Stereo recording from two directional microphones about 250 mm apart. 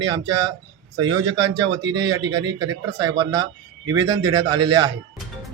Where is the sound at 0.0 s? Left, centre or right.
Centre.